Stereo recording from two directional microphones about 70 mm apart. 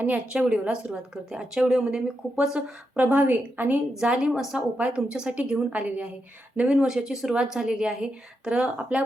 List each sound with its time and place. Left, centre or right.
0.0 s speech: centre
2.9 s a woman's voice: right
4.3 s a woman's voice: centre